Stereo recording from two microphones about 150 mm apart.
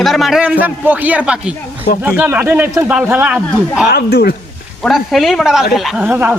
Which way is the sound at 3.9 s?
90° left.